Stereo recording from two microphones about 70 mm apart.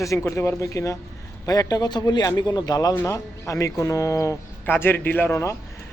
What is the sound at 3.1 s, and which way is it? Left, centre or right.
Speech, left.